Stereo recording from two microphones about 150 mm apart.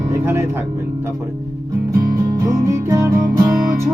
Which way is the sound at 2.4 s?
20° right (ahead or behind).